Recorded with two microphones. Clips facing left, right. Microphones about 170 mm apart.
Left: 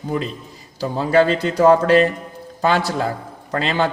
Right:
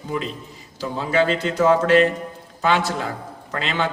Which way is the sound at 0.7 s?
40° left (ahead or behind).